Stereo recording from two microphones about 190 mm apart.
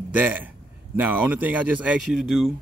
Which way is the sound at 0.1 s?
10° right (ahead or behind).